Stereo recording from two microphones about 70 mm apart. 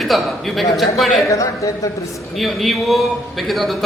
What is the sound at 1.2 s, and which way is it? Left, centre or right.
Speech, left.